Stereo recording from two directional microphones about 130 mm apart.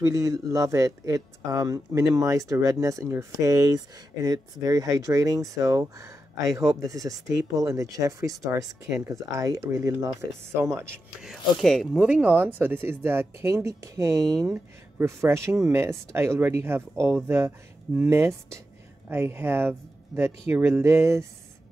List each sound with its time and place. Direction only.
0.0 s speech: 25° right (ahead or behind)
11.1 s speech: centre (ahead or behind); by 21.3 s 20° right (ahead or behind)